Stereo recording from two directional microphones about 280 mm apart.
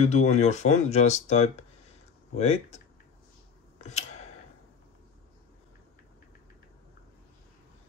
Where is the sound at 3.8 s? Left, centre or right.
Left.